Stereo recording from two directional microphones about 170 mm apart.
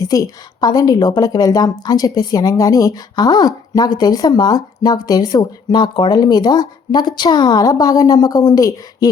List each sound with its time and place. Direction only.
0.0 s a woman's voice: 20° left (ahead or behind)